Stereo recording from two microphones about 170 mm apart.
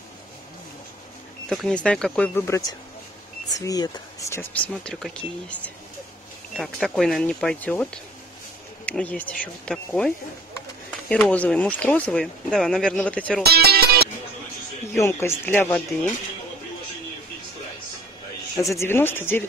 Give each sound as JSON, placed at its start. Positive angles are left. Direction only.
{"t": 1.5, "sound": "speech", "side_deg": 5}
{"t": 13.5, "sound": "music", "side_deg": -70}
{"t": 15.0, "sound": "speech", "side_deg": 15}
{"t": 18.6, "sound": "speech", "side_deg": 15}